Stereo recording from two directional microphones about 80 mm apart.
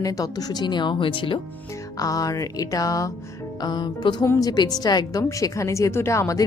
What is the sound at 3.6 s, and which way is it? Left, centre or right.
A woman's voice, left.